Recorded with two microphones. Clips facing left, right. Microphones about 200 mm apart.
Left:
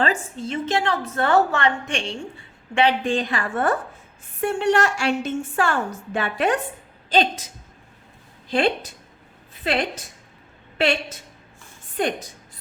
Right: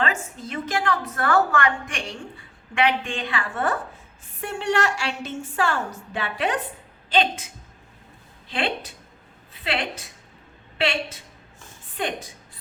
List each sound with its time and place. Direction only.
0.0 s a woman's voice: 30° left (ahead or behind)